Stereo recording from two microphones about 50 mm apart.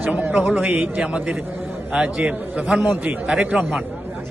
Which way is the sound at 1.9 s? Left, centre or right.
Right.